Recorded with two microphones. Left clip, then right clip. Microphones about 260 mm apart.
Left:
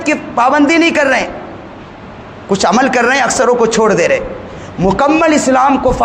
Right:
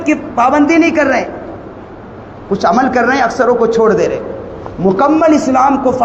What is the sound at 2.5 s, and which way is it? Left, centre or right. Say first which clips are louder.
A man's voice: even; left.